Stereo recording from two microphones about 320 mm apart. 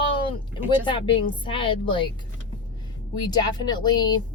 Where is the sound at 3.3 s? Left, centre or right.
Centre.